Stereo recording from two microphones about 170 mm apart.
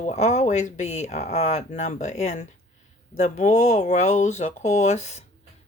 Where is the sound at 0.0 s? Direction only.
45° left (ahead or behind).